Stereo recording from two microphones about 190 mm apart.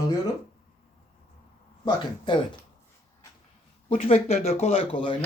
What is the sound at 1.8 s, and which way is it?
Speech, 25° left (ahead or behind).